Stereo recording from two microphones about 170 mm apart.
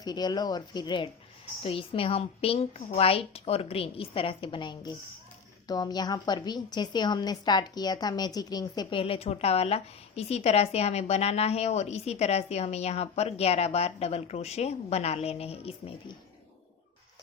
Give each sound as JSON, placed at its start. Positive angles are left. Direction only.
{"t": 0.0, "sound": "a woman's voice", "side_deg": 25}